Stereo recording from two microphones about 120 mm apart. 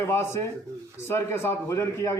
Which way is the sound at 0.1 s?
20° left (ahead or behind).